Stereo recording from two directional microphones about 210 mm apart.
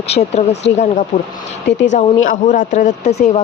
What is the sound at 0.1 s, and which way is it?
Speech, 30° left (ahead or behind).